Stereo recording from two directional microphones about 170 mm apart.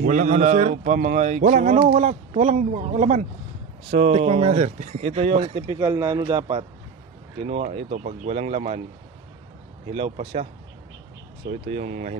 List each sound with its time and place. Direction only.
0.0 s speech: 50° right (ahead or behind)
4.5 s speech: 50° right (ahead or behind)
5.7 s speech: 20° right (ahead or behind)
7.7 s speech: 40° right (ahead or behind)
9.9 s speech: 35° right (ahead or behind)
11.6 s speech: 40° right (ahead or behind)